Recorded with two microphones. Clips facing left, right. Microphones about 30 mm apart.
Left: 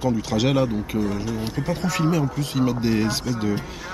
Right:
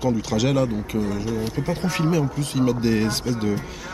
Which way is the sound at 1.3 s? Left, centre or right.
Centre.